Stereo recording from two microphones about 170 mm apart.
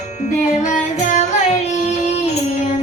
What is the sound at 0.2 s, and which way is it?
Music, 45° left (ahead or behind).